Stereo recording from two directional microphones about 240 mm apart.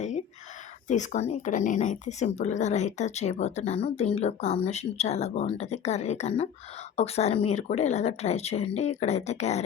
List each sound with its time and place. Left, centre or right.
0.9 s speech: left